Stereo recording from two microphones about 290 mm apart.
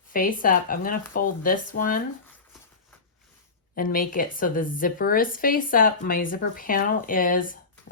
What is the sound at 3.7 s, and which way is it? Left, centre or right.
Speech, left.